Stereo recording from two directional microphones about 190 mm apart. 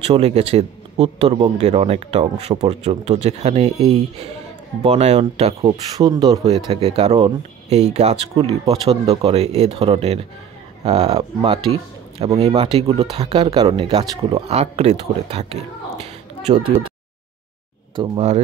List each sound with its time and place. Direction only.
0.0 s speech: 35° right (ahead or behind)
5.6 s speech: 20° right (ahead or behind)
6.4 s speech: 35° right (ahead or behind)
17.9 s speech: 30° right (ahead or behind)